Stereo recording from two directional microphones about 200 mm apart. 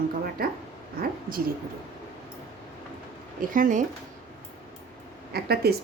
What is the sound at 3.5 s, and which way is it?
Speech, 40° right (ahead or behind).